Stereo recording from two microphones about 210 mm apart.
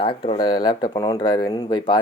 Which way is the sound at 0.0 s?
25° left (ahead or behind).